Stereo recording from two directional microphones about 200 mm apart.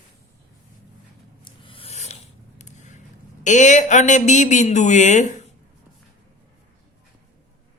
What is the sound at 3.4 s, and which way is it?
Speech, 40° left (ahead or behind).